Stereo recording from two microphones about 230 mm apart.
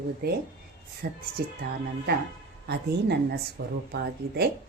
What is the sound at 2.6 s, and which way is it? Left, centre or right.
Speech, right.